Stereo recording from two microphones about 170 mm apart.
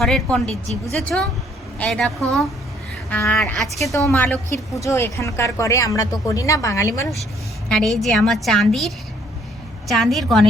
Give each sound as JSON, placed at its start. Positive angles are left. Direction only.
{"t": 0.0, "sound": "a woman's voice", "side_deg": 0}
{"t": 7.7, "sound": "a woman's voice", "side_deg": 0}
{"t": 9.9, "sound": "a woman's voice", "side_deg": 0}